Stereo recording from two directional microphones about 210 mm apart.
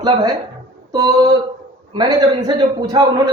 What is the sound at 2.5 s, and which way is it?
Speech, 20° right (ahead or behind).